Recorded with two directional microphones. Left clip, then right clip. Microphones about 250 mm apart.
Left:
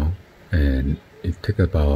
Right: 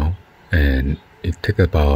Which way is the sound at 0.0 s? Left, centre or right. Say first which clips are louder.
Right 3 dB; centre.